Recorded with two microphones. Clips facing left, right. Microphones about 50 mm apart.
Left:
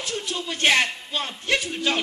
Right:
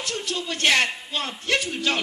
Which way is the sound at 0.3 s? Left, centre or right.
Left.